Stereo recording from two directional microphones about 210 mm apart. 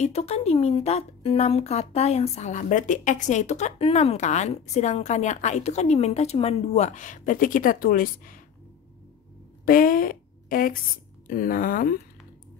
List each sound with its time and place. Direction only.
0.0 s speech: 30° left (ahead or behind)
9.7 s a woman's voice: 40° left (ahead or behind)